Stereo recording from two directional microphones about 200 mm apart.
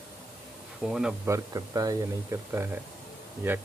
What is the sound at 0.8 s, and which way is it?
Speech, 5° right (ahead or behind).